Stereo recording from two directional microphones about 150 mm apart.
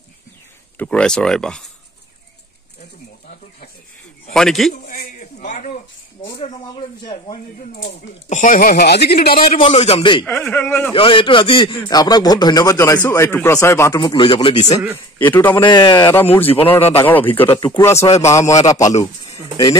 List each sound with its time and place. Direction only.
0.7 s speech: 5° left (ahead or behind)
4.3 s speech: 5° left (ahead or behind)
4.7 s a sound: 60° left (ahead or behind)
6.4 s a man's voice: 30° left (ahead or behind)
8.3 s speech: 60° left (ahead or behind); by 9.5 s 85° left
9.6 s a man's voice: 40° left (ahead or behind)
10.2 s speech: 10° left (ahead or behind)
10.9 s a man's voice: 35° left (ahead or behind); by 14.0 s 15° left (ahead or behind)
14.0 s a man's voice: 35° left (ahead or behind)
15.1 s speech: 10° left (ahead or behind)
15.6 s a man's voice: 30° left (ahead or behind)
16.2 s a man's voice: 15° left (ahead or behind)
19.2 s bird: 25° left (ahead or behind)